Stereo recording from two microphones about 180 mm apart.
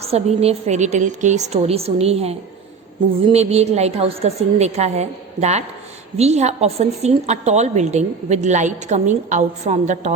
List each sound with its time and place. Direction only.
0.0 s a woman's voice: 35° right (ahead or behind)